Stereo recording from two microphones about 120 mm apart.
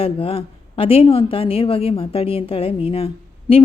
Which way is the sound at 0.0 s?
50° left (ahead or behind).